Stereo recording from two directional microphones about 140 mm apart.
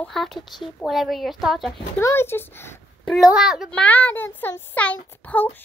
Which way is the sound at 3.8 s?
10° left (ahead or behind).